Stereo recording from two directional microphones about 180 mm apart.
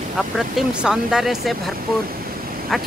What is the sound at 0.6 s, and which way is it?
Speech, 5° right (ahead or behind).